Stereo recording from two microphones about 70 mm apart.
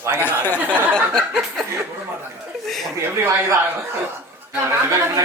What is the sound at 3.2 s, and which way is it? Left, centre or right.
Speech, right.